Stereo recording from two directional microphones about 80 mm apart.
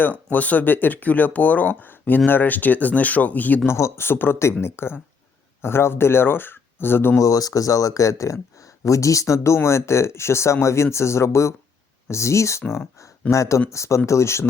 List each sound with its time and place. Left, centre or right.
0.0 s speech: left
3.7 s speech: left
7.2 s speech: left